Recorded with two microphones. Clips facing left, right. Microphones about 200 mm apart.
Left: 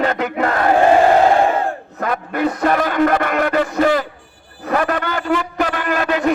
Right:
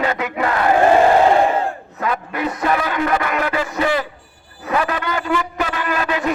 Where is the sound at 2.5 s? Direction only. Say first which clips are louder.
Left 1 dB; 40° left (ahead or behind).